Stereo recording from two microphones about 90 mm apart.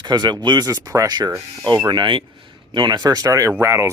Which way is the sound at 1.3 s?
35° right (ahead or behind).